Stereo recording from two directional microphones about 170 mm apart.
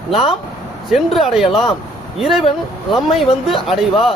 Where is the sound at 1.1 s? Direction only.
Centre (ahead or behind).